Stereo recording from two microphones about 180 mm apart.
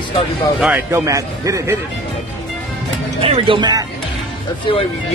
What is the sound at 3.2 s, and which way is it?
Speech, 30° right (ahead or behind).